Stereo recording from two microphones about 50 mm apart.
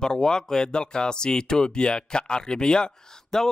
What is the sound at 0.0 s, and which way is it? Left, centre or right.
Speech, centre.